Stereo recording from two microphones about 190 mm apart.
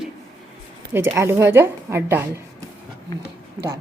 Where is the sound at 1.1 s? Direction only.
15° right (ahead or behind).